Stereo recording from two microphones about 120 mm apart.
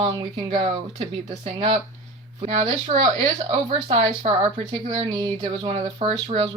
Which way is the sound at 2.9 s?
40° right (ahead or behind).